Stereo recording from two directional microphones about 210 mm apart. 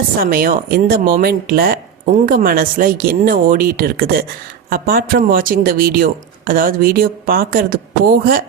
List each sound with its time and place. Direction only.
0.2 s speech: 45° right (ahead or behind)